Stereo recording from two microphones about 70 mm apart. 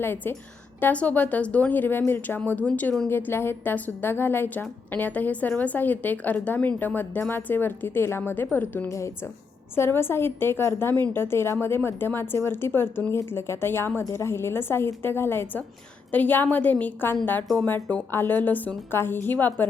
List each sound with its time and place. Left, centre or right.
0.0 s a woman's voice: left
2.4 s a woman's voice: centre
8.9 s speech: left
9.7 s a woman's voice: left